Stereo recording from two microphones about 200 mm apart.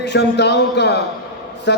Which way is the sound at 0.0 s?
60° left (ahead or behind).